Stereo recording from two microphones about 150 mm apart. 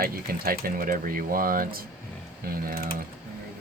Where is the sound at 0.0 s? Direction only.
80° right.